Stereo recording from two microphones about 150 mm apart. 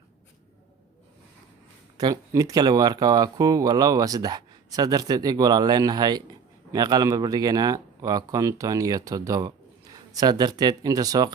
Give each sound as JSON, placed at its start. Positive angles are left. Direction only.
{"t": 2.0, "sound": "speech", "side_deg": -25}